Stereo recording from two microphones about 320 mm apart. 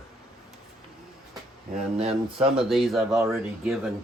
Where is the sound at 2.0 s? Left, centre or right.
Centre.